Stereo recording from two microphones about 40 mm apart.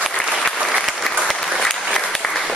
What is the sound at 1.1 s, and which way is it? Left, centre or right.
Applause, centre.